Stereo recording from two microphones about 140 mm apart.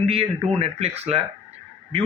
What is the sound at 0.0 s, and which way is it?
A man's voice, 45° right (ahead or behind).